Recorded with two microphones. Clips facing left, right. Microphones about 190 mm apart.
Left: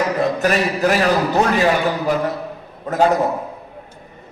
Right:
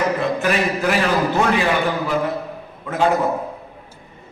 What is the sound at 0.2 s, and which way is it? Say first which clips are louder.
A man's voice: left 2 dB; 40° left (ahead or behind).